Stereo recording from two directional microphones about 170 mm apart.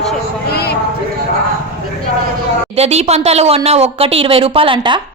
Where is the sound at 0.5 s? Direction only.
70° left (ahead or behind).